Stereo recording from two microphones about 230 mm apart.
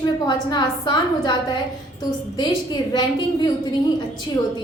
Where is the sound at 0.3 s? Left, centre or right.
Centre.